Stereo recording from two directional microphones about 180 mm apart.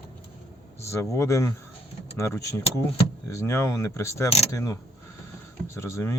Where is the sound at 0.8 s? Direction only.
15° left (ahead or behind).